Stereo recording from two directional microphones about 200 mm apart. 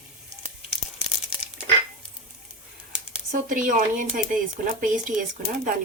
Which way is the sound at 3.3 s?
40° right (ahead or behind).